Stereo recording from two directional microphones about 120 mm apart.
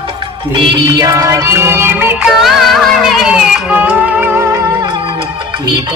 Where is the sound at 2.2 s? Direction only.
Centre (ahead or behind); by 4.7 s 20° right (ahead or behind).